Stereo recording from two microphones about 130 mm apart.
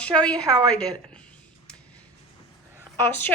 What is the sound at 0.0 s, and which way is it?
Speech, 10° left (ahead or behind).